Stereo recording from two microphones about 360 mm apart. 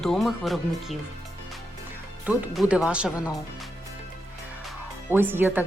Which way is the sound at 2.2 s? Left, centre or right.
Centre.